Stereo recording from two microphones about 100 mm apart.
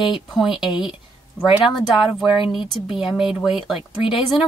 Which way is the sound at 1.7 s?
Centre (ahead or behind).